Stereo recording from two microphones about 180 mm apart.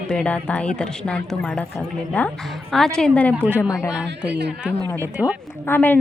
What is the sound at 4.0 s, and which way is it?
Speech, 70° right (ahead or behind).